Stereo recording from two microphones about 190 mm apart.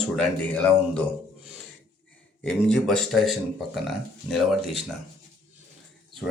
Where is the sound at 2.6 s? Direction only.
5° left (ahead or behind).